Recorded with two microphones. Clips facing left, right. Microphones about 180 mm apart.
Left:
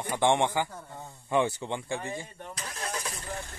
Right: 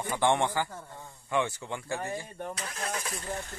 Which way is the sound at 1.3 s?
30° left (ahead or behind).